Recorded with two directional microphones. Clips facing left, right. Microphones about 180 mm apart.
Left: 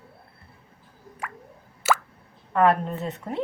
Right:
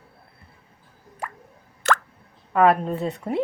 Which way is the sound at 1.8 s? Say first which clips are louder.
Right 1 dB; 5° left (ahead or behind).